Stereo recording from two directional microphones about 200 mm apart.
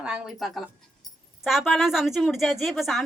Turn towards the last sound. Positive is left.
turn(degrees=0)  # may be behind; listen again after turning